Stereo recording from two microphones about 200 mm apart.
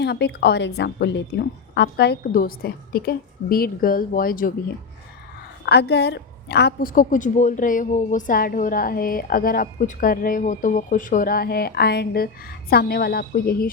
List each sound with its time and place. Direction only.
0.0 s a woman's voice: 55° left (ahead or behind)
5.6 s a woman's voice: 55° left (ahead or behind)